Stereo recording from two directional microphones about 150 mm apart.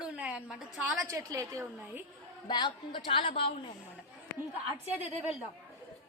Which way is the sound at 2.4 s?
30° left (ahead or behind).